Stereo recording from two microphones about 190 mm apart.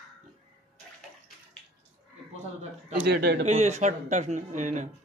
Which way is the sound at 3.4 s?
35° right (ahead or behind).